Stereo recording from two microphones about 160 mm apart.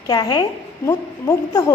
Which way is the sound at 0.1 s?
25° left (ahead or behind).